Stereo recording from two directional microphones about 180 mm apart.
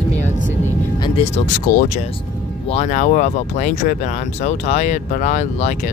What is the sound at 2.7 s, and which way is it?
Speech, 40° left (ahead or behind).